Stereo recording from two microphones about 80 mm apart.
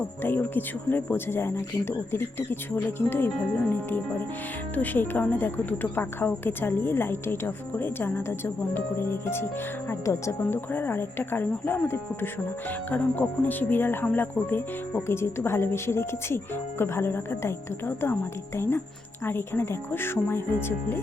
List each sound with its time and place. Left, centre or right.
0.0 s speech: left
10.7 s speech: left